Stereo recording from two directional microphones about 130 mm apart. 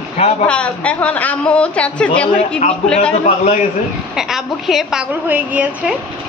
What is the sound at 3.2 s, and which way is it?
Speech, 70° left (ahead or behind).